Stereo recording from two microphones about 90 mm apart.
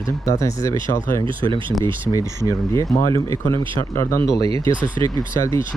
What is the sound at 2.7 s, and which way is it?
Speech, 40° left (ahead or behind).